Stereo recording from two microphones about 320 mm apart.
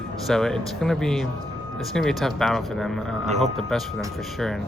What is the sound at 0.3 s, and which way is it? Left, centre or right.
Speech, centre.